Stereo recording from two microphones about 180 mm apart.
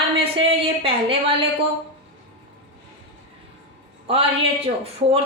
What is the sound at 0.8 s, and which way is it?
Speech, 30° right (ahead or behind).